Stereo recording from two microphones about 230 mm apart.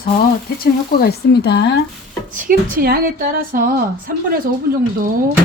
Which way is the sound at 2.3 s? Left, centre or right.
Right.